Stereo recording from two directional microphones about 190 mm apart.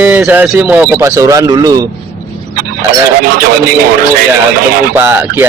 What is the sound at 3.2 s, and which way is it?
Speech, 50° right (ahead or behind).